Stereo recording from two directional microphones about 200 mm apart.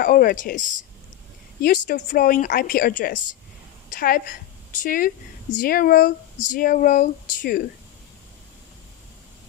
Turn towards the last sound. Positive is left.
turn(degrees=40)  # may be behind; listen again after turning